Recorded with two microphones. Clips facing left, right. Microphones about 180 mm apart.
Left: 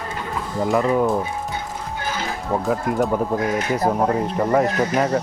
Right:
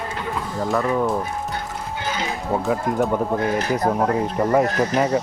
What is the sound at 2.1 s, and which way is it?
Speech, 5° left (ahead or behind).